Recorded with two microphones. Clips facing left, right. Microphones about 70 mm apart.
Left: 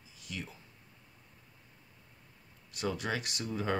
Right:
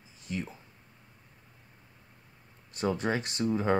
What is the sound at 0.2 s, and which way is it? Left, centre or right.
Speech, right.